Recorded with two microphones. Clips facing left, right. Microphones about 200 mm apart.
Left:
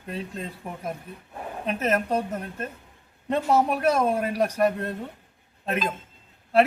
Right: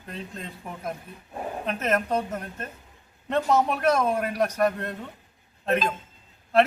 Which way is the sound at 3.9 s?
30° left (ahead or behind).